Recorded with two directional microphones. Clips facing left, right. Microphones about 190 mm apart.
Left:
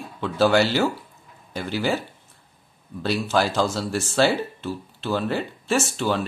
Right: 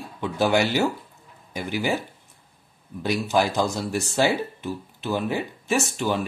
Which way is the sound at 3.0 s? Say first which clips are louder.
Even; 15° right (ahead or behind).